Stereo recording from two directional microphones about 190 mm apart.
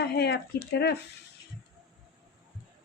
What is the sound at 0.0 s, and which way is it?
Speech, 60° left (ahead or behind).